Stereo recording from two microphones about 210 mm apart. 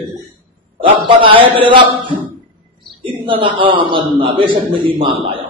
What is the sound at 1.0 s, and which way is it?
A man's voice, 25° right (ahead or behind).